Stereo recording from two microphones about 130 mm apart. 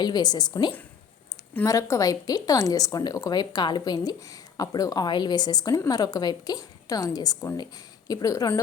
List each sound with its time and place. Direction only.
0.0 s a woman's voice: 30° left (ahead or behind)